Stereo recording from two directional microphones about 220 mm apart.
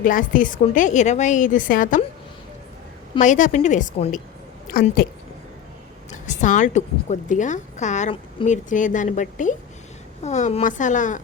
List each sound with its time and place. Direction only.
0.0 s a woman's voice: 35° left (ahead or behind)
3.2 s a woman's voice: 35° left (ahead or behind)
6.1 s a woman's voice: 35° left (ahead or behind)